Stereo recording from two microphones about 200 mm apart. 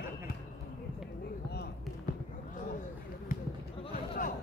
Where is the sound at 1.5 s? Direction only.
50° left (ahead or behind).